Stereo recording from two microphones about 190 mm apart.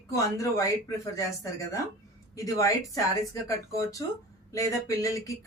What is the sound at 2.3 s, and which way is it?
Speech, 15° left (ahead or behind).